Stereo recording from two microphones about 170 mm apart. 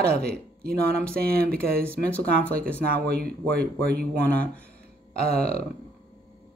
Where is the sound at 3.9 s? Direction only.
60° right (ahead or behind).